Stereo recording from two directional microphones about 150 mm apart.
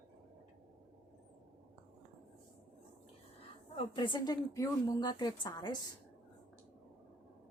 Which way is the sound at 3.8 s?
30° left (ahead or behind).